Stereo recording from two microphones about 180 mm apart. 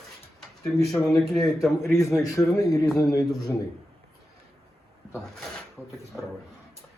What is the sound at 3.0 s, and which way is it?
Speech, 20° left (ahead or behind).